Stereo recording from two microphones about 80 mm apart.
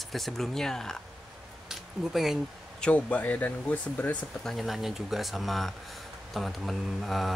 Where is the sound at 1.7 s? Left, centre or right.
Centre.